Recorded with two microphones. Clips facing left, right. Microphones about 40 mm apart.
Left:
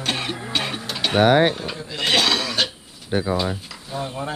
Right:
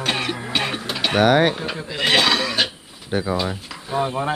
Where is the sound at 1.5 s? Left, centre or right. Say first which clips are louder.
Right 3 dB; centre.